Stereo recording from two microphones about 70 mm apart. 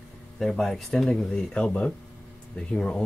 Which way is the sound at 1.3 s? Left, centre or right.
Centre.